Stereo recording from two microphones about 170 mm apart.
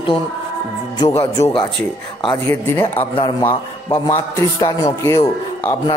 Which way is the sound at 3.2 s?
25° left (ahead or behind).